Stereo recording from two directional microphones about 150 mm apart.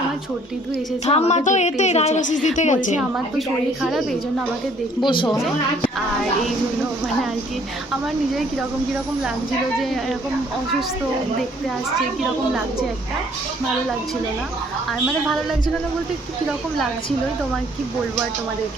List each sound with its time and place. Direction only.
1.0 s a woman's voice: 45° left (ahead or behind)
3.0 s a woman's voice: centre (ahead or behind)
5.0 s a woman's voice: 30° left (ahead or behind)